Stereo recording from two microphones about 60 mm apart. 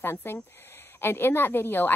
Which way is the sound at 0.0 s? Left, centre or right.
Left.